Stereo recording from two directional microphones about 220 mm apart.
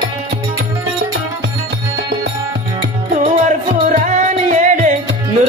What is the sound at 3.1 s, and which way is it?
Music, 35° right (ahead or behind).